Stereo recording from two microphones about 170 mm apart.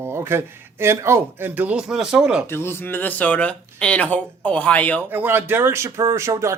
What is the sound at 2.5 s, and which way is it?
Speech, 15° left (ahead or behind).